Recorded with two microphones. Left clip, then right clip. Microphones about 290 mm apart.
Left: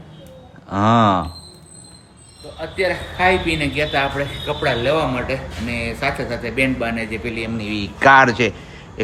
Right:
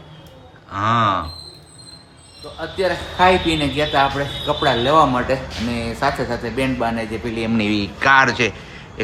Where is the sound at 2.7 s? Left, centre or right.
Centre.